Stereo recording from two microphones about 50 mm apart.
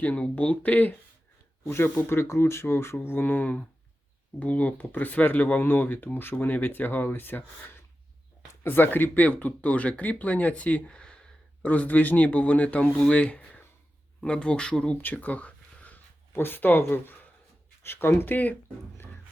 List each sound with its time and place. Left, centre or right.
0.0 s speech: left
1.6 s speech: left
9.2 s speech: left
10.8 s speech: left
14.2 s speech: centre
15.0 s a sound: left
16.3 s speech: left